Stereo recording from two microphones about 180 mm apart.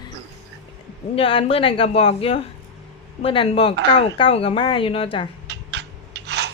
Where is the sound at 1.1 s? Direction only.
30° left (ahead or behind).